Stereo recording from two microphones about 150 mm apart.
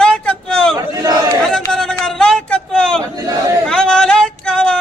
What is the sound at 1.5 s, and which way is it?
A man's voice, 5° left (ahead or behind).